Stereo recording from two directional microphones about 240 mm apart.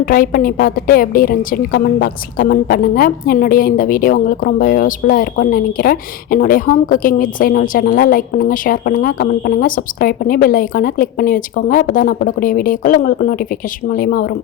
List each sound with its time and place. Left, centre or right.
0.0 s a woman's voice: left